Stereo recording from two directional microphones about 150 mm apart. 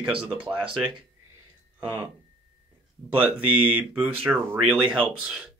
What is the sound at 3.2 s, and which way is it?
Speech, 10° right (ahead or behind).